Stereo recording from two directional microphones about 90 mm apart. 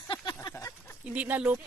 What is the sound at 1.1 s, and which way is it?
Speech, 15° right (ahead or behind).